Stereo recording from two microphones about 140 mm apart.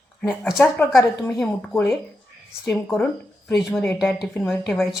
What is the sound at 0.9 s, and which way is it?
Speech, 20° left (ahead or behind).